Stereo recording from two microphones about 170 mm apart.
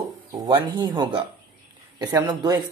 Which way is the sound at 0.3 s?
25° right (ahead or behind).